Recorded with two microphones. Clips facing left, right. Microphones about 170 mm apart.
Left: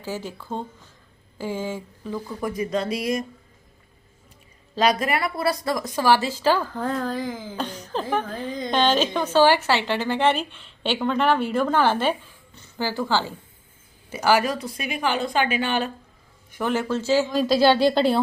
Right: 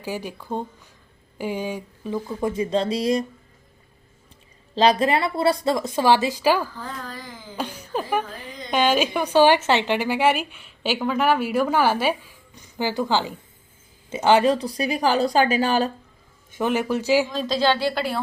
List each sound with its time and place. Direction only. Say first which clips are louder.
0.0 s a woman's voice: right 1 dB; 15° right (ahead or behind); by 3.2 s 30° right (ahead or behind)
4.7 s a woman's voice: right 3 dB; 30° right (ahead or behind); by 6.7 s 10° right (ahead or behind)
6.7 s speech: left 9 dB; 55° left (ahead or behind)
7.5 s music: even; 10° right (ahead or behind)
8.7 s a woman's voice: right 1 dB; 10° right (ahead or behind); by 15.9 s 35° right (ahead or behind)
16.5 s a woman's voice: right 2 dB; 20° right (ahead or behind)
17.3 s a woman's voice: left 4 dB; 5° left (ahead or behind); by 18.2 s 25° left (ahead or behind)